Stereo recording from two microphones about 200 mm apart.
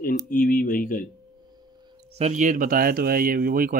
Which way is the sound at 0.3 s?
45° left (ahead or behind).